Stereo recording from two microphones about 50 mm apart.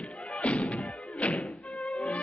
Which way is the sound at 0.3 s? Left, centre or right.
Left.